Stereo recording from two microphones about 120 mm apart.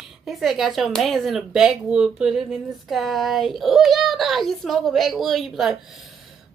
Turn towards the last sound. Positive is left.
turn(degrees=0)  # may be behind; listen again after turning